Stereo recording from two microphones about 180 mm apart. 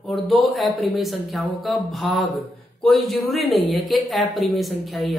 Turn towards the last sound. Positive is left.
turn(degrees=0)  # may be behind; listen again after turning